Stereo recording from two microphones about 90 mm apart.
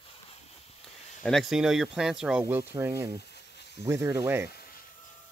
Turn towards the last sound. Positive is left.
turn(degrees=-35)  # may be behind; listen again after turning